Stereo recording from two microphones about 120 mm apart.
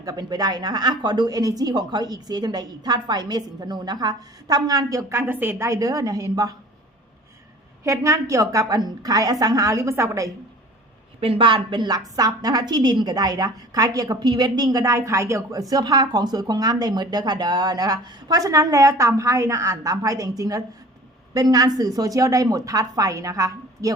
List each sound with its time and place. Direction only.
0.0 s speech: 30° right (ahead or behind)
7.9 s a woman's voice: 25° right (ahead or behind)
11.2 s a woman's voice: 50° right (ahead or behind); by 23.9 s 30° right (ahead or behind)